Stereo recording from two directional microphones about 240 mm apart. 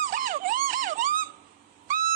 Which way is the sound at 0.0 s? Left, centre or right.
Right.